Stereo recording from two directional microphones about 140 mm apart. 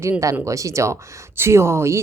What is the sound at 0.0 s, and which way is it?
A woman's voice, 20° right (ahead or behind).